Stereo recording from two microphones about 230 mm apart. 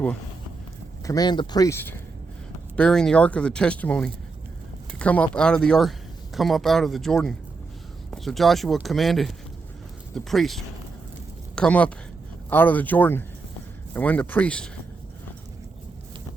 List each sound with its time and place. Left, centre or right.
1.0 s speech: centre